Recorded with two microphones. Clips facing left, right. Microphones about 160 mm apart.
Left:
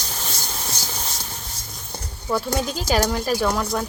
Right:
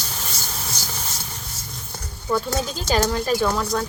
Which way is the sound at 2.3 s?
10° left (ahead or behind).